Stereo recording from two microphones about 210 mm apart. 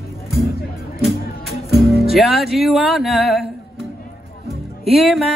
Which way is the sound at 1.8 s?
Centre (ahead or behind).